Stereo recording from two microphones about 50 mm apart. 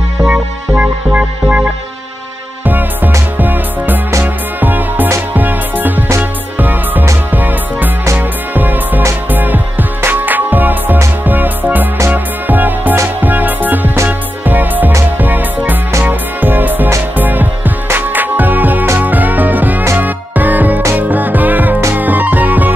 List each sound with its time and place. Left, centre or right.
0.3 s music: right